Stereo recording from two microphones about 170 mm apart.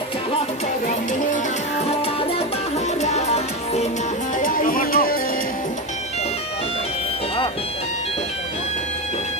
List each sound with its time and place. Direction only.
2.7 s music: 40° left (ahead or behind)
4.4 s music: 55° left (ahead or behind)